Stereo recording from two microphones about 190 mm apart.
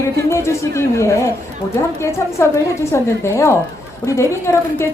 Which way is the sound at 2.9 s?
15° left (ahead or behind).